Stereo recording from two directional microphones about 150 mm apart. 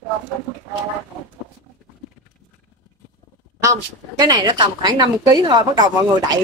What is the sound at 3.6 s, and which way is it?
A woman's voice, 25° right (ahead or behind).